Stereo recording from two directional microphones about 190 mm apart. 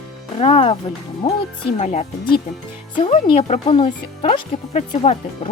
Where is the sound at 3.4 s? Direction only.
30° left (ahead or behind).